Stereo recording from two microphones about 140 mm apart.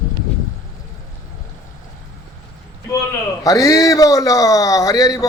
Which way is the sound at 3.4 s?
25° left (ahead or behind).